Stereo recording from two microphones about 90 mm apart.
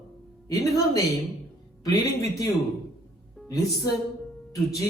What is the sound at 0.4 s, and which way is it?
A woman's voice, 40° left (ahead or behind).